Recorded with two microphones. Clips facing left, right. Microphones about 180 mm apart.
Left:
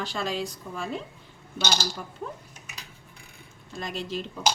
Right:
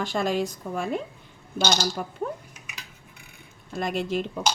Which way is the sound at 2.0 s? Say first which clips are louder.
Right 7 dB; 65° right (ahead or behind).